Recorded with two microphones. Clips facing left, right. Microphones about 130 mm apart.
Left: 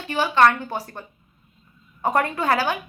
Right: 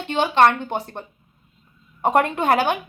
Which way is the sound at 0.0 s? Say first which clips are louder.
Right 1 dB; 25° right (ahead or behind).